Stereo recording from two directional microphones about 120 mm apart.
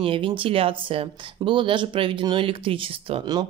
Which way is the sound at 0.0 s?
45° right (ahead or behind).